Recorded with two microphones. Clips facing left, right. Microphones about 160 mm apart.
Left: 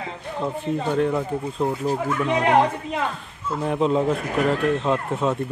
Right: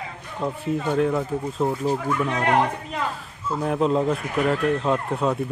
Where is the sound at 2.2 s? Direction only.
15° left (ahead or behind).